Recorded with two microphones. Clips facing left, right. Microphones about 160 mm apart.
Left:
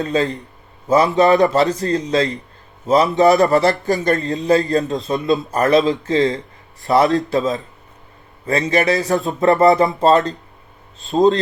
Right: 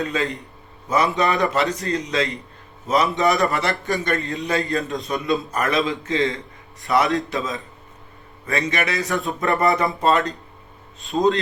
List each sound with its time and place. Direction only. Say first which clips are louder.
0.0 s a man's voice: left 5 dB; 40° left (ahead or behind)